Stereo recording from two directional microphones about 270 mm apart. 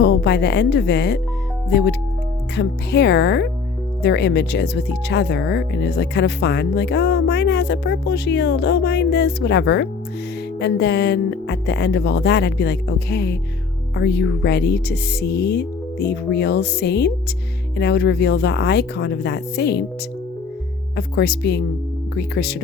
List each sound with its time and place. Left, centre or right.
0.0 s speech: left
20.9 s speech: left